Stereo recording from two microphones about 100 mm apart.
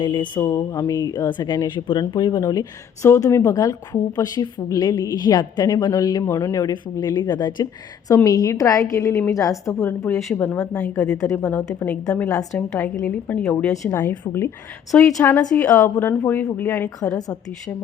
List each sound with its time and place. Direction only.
0.0 s speech: 50° left (ahead or behind)
0.3 s speech: 30° left (ahead or behind)
3.4 s speech: 40° left (ahead or behind)
6.2 s a woman's voice: 30° left (ahead or behind)